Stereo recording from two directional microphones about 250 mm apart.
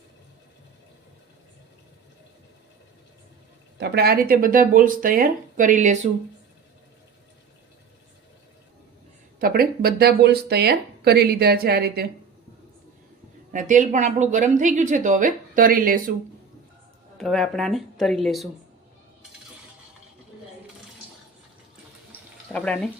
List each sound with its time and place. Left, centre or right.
3.8 s speech: right
9.4 s speech: right
13.5 s speech: right
17.2 s speech: centre
22.5 s speech: centre